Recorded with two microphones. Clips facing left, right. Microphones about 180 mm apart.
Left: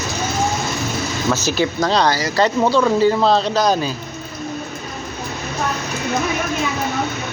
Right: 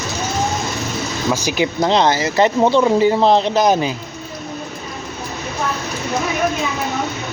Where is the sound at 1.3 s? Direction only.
15° right (ahead or behind).